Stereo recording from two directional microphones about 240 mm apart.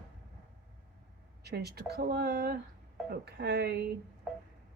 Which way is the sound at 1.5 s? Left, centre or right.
Right.